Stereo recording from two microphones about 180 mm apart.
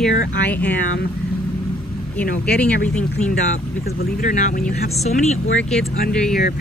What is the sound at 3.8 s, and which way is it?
Speech, 45° left (ahead or behind).